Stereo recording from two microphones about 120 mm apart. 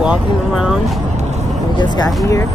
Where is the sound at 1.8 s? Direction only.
35° left (ahead or behind).